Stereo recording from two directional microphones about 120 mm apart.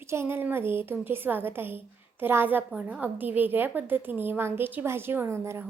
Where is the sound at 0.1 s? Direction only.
20° right (ahead or behind).